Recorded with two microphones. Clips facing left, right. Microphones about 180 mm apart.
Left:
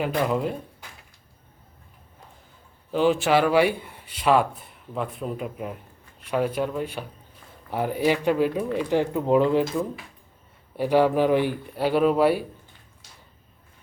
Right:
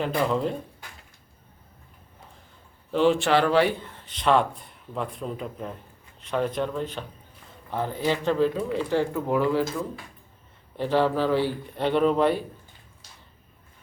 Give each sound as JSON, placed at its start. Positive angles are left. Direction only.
{"t": 0.3, "sound": "speech", "side_deg": 10}
{"t": 2.9, "sound": "speech", "side_deg": 5}
{"t": 11.8, "sound": "speech", "side_deg": 5}